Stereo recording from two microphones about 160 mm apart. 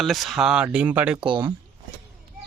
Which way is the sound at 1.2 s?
30° right (ahead or behind).